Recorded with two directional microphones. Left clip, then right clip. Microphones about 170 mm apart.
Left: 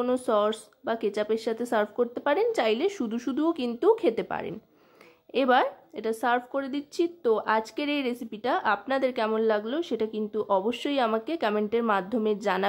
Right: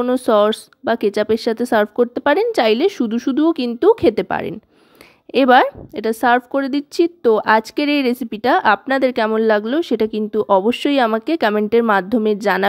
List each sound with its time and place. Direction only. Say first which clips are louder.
0.0 s a woman's voice: right 10 dB; 45° right (ahead or behind)